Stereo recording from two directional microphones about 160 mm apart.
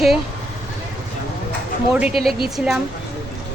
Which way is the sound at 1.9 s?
5° right (ahead or behind).